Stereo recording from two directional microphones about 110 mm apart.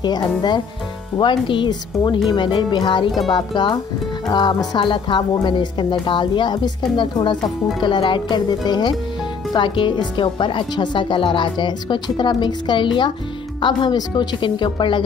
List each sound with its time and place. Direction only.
0.0 s a woman's voice: 40° left (ahead or behind)